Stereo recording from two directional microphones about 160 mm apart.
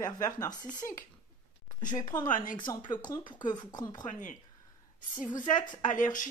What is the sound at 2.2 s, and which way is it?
Speech, 55° left (ahead or behind).